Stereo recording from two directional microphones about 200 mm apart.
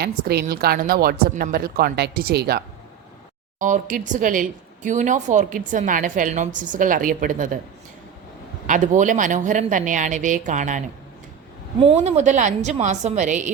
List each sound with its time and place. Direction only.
0.0 s speech: 50° right (ahead or behind)
3.6 s speech: 40° right (ahead or behind)
8.6 s speech: 40° right (ahead or behind)